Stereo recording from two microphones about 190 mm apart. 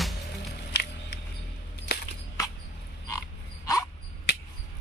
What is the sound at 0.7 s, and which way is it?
Music, 60° left (ahead or behind).